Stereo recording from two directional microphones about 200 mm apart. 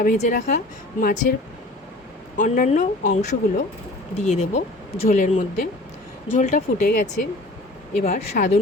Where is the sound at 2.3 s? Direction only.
40° left (ahead or behind).